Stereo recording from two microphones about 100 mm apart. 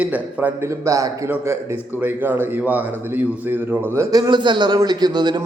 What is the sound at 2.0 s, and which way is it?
A man's voice, 20° right (ahead or behind).